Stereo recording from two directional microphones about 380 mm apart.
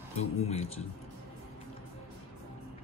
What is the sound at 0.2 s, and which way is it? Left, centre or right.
Speech, centre.